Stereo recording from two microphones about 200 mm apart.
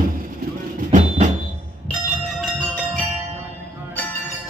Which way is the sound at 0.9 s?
35° right (ahead or behind).